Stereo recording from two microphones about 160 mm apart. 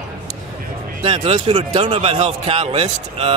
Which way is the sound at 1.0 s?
40° right (ahead or behind).